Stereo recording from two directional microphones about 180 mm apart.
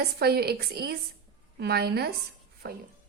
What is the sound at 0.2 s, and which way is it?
A woman's voice, 60° right (ahead or behind).